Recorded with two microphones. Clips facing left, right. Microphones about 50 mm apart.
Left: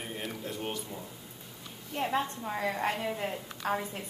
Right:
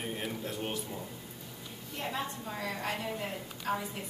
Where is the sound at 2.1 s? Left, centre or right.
Left.